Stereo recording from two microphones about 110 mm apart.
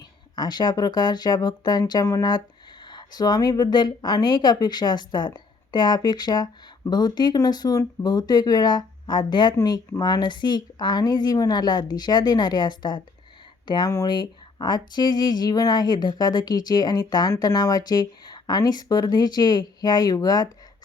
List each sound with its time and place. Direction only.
0.3 s speech: 40° left (ahead or behind)